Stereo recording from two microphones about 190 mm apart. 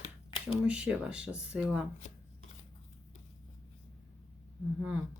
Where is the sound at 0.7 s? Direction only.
5° right (ahead or behind).